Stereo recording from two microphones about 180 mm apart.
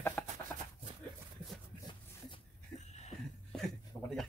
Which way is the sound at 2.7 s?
40° left (ahead or behind).